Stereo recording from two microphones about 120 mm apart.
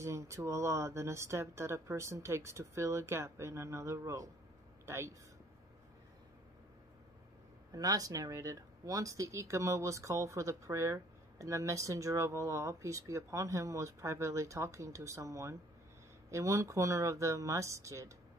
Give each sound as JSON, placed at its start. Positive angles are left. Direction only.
{"t": 0.0, "sound": "speech", "side_deg": -25}
{"t": 7.7, "sound": "speech", "side_deg": -30}